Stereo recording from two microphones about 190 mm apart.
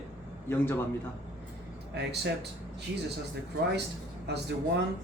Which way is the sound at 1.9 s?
60° right (ahead or behind).